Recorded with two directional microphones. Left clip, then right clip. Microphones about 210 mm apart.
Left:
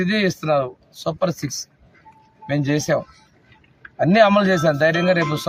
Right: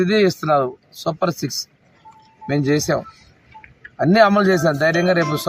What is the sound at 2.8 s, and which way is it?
Speech, 5° left (ahead or behind).